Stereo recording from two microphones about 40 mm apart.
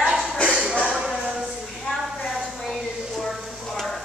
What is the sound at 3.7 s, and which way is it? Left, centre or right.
Stir, centre.